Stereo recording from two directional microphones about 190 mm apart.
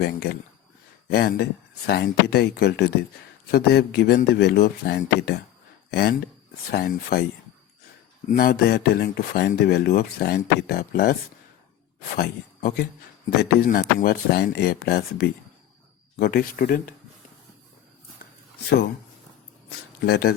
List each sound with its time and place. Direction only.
0.0 s speech: 60° left (ahead or behind)
8.3 s speech: 50° left (ahead or behind)
20.0 s speech: 55° left (ahead or behind)